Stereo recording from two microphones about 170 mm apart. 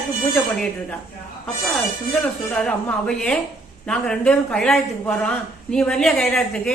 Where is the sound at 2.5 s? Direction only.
5° left (ahead or behind).